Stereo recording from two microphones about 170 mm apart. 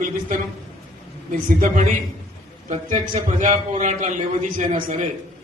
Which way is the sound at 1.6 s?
45° right (ahead or behind).